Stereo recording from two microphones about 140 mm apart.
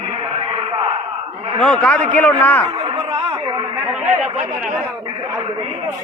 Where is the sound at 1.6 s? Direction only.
5° left (ahead or behind).